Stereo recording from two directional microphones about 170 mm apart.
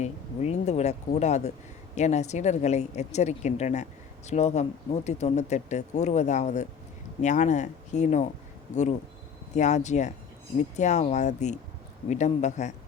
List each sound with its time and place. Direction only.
0.0 s speech: 40° left (ahead or behind)
9.6 s speech: 45° left (ahead or behind)